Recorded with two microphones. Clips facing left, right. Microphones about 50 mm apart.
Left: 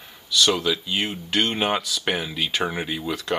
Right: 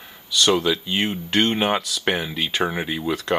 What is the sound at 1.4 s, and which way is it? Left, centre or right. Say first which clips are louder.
Speech: right 2 dB; centre.